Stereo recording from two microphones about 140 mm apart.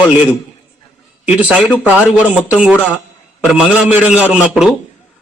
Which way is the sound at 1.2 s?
10° right (ahead or behind).